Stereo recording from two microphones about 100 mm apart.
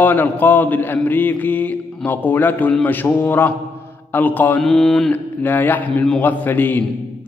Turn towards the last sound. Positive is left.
turn(degrees=20)  # may be behind; listen again after turning